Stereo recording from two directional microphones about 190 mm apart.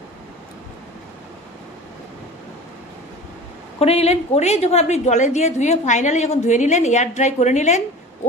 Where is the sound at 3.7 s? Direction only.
35° left (ahead or behind).